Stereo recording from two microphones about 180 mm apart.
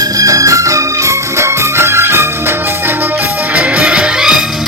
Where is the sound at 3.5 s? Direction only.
10° right (ahead or behind).